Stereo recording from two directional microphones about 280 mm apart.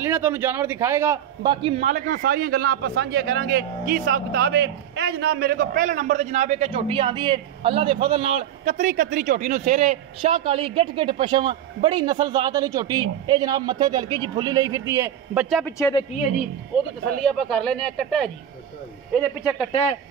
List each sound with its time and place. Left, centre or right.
0.0 s a man's voice: centre
15.5 s speech: centre
19.7 s a man's voice: left